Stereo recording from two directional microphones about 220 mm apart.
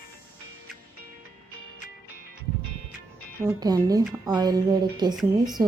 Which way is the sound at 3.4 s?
15° right (ahead or behind).